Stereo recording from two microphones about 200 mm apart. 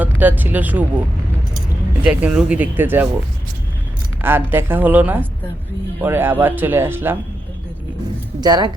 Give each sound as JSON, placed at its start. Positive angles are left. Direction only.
{"t": 0.0, "sound": "speech", "side_deg": -10}
{"t": 2.0, "sound": "a woman's voice", "side_deg": -5}
{"t": 4.2, "sound": "a woman's voice", "side_deg": -10}
{"t": 8.4, "sound": "speech", "side_deg": -20}